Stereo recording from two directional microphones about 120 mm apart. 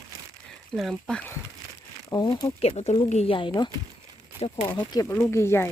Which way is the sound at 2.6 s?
60° left (ahead or behind).